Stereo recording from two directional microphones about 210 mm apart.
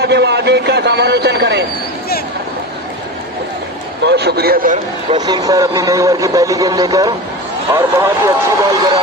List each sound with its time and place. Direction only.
0.0 s a man's voice: 55° right (ahead or behind)
4.0 s a man's voice: 50° right (ahead or behind)
5.2 s a man's voice: 15° right (ahead or behind)